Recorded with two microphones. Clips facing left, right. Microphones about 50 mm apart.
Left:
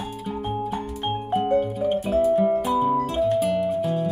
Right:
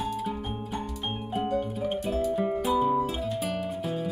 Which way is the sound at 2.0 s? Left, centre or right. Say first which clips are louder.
Left 8 dB; centre.